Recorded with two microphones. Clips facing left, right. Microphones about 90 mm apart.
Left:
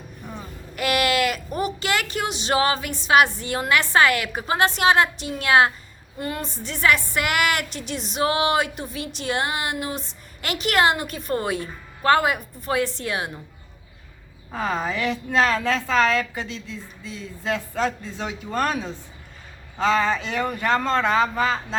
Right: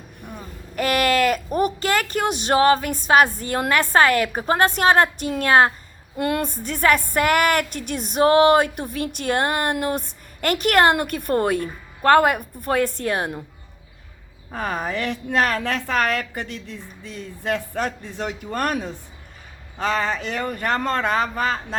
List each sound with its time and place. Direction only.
0.8 s speech: 40° right (ahead or behind)
6.1 s speech: 60° right (ahead or behind); by 13.3 s 45° right (ahead or behind)
14.5 s a woman's voice: 55° right (ahead or behind)
20.6 s speech: 55° right (ahead or behind)